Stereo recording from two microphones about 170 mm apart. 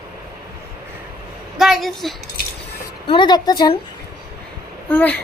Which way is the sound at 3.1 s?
25° left (ahead or behind).